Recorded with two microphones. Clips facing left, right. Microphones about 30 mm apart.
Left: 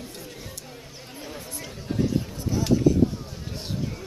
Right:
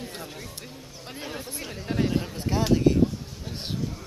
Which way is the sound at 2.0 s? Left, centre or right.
Right.